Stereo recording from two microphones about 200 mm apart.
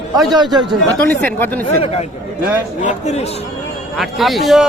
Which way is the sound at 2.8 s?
35° left (ahead or behind).